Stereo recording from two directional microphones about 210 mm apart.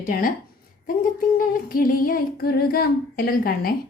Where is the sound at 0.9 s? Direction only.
40° left (ahead or behind).